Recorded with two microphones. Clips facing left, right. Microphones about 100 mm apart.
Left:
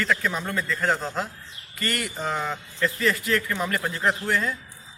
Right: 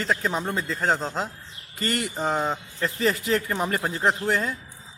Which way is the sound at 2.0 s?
35° right (ahead or behind).